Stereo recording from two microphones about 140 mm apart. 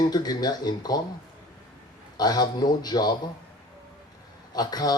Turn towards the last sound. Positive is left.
turn(degrees=30)  # may be behind; listen again after turning